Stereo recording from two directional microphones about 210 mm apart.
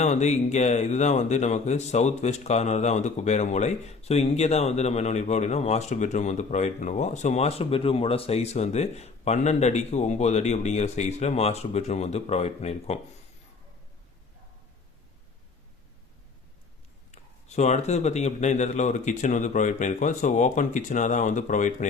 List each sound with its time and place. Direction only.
0.0 s speech: 35° left (ahead or behind)
17.1 s speech: 35° left (ahead or behind)